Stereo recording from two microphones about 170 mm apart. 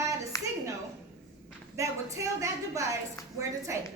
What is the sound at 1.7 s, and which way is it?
A woman's voice, 20° right (ahead or behind).